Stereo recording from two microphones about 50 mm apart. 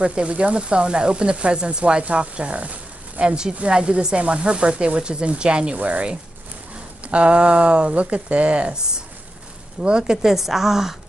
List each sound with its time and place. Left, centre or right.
0.0 s a woman's voice: right; by 11.0 s centre